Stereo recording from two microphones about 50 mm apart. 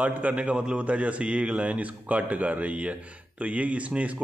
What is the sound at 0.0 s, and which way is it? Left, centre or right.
A man's voice, right.